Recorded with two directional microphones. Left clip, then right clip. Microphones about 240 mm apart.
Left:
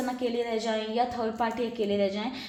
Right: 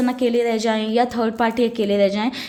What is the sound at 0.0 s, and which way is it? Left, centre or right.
A woman's voice, right.